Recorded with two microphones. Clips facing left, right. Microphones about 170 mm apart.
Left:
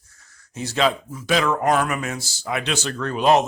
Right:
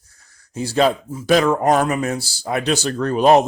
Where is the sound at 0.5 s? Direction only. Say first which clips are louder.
Right 4 dB; 35° right (ahead or behind).